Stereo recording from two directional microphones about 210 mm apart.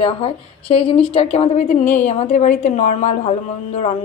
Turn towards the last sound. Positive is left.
turn(degrees=30)  # may be behind; listen again after turning